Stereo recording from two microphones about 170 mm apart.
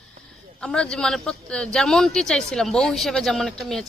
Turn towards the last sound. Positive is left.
turn(degrees=0)  # may be behind; listen again after turning